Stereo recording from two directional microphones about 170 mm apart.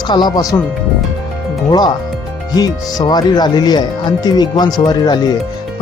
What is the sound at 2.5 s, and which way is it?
Speech, 20° left (ahead or behind).